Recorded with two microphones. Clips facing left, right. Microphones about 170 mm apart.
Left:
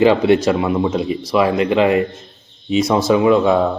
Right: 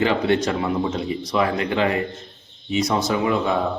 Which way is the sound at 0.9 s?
20° left (ahead or behind).